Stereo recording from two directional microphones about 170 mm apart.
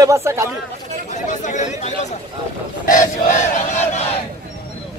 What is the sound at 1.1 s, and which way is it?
Chatter, 45° left (ahead or behind).